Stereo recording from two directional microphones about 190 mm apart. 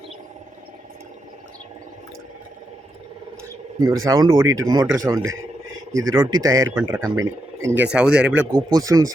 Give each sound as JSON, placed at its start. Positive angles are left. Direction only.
{"t": 3.8, "sound": "speech", "side_deg": -15}
{"t": 8.5, "sound": "speech", "side_deg": -20}